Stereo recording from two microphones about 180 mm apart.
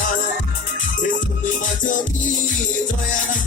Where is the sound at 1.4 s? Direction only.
45° left (ahead or behind).